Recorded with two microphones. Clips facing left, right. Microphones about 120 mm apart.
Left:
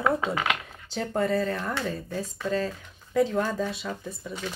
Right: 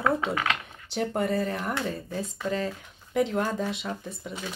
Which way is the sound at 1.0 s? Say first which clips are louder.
Left 1 dB; 25° right (ahead or behind).